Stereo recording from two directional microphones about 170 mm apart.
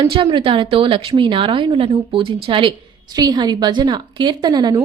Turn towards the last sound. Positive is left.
turn(degrees=-25)  # may be behind; listen again after turning